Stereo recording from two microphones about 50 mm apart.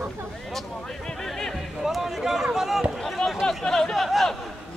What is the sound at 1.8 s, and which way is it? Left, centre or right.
Speech, centre.